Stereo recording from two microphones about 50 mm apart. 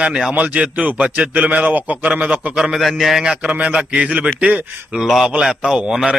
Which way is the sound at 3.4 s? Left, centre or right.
Right.